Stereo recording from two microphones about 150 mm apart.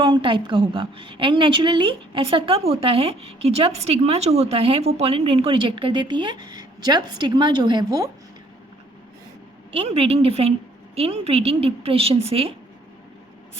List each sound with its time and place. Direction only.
0.0 s a woman's voice: 30° right (ahead or behind)
9.7 s a woman's voice: 40° right (ahead or behind)